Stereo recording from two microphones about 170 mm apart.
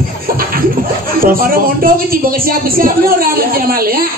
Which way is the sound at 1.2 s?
60° right (ahead or behind).